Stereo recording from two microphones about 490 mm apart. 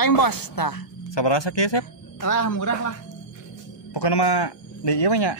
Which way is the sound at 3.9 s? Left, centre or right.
Left.